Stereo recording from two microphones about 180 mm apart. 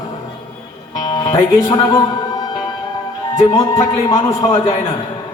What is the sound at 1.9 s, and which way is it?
Speech, 25° left (ahead or behind).